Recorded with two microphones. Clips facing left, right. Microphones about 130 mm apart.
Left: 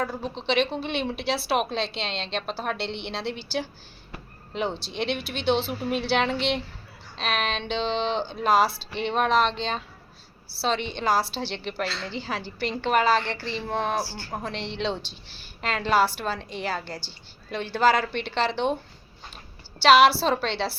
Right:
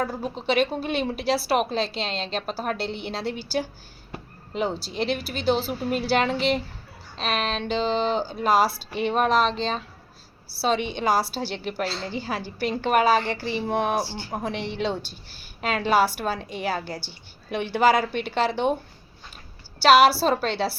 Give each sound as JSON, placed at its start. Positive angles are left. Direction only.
{"t": 0.0, "sound": "a woman's voice", "side_deg": -10}
{"t": 11.9, "sound": "a woman's voice", "side_deg": -35}
{"t": 12.2, "sound": "a woman's voice", "side_deg": -10}
{"t": 19.8, "sound": "a woman's voice", "side_deg": -5}